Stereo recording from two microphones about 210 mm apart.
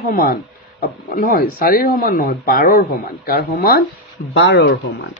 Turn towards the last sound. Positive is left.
turn(degrees=55)  # may be behind; listen again after turning